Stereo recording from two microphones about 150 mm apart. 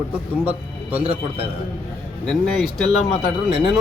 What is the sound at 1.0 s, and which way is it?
Speech, 40° right (ahead or behind).